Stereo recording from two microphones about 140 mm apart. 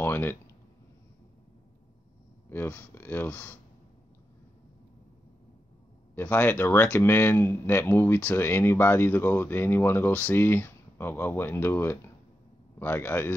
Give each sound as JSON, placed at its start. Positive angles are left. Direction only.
{"t": 0.0, "sound": "a sound", "side_deg": 15}
{"t": 2.5, "sound": "speech", "side_deg": 15}
{"t": 6.1, "sound": "speech", "side_deg": 15}